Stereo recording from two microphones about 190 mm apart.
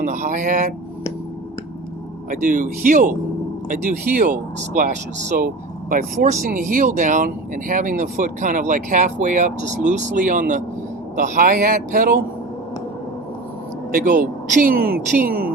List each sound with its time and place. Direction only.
0.0 s speech: 40° right (ahead or behind)
2.3 s speech: 45° right (ahead or behind)
13.9 s speech: 45° right (ahead or behind)